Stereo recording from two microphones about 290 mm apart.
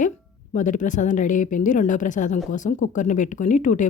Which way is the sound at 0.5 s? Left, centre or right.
Left.